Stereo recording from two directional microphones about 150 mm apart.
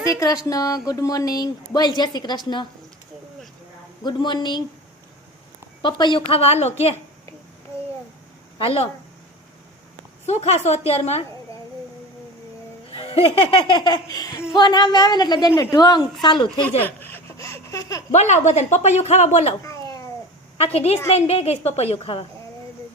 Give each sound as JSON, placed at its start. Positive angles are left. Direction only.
{"t": 0.0, "sound": "speech", "side_deg": 20}
{"t": 4.0, "sound": "speech", "side_deg": 30}
{"t": 5.8, "sound": "laughter", "side_deg": 30}
{"t": 8.5, "sound": "speech", "side_deg": 40}
{"t": 10.2, "sound": "speech", "side_deg": 50}
{"t": 12.9, "sound": "laughter", "side_deg": 40}
{"t": 14.5, "sound": "speech", "side_deg": 30}
{"t": 16.2, "sound": "laughter", "side_deg": 30}
{"t": 16.8, "sound": "laughter", "side_deg": 15}
{"t": 18.1, "sound": "speech", "side_deg": 50}
{"t": 20.7, "sound": "speech", "side_deg": 45}